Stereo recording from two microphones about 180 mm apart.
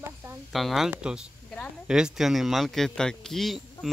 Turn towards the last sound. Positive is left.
turn(degrees=0)  # may be behind; listen again after turning